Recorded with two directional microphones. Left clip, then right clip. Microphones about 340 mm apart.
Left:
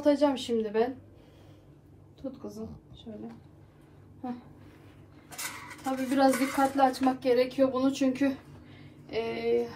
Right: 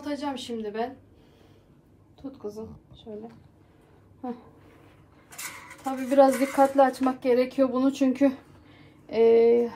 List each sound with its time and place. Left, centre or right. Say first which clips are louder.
0.0 s a woman's voice: left 7 dB; centre
2.3 s a woman's voice: right 4 dB; centre
6.0 s a woman's voice: right 6 dB; centre